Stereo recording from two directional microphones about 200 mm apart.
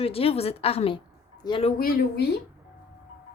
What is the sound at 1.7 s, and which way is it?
Speech, 45° left (ahead or behind).